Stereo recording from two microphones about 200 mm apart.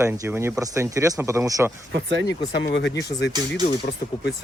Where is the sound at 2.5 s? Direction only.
60° left (ahead or behind).